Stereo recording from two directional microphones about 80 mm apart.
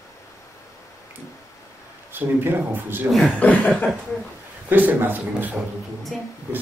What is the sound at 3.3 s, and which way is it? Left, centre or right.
Chuckle, centre.